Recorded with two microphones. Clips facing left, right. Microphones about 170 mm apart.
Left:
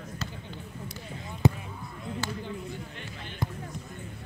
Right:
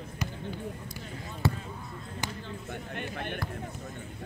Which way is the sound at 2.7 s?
60° right (ahead or behind).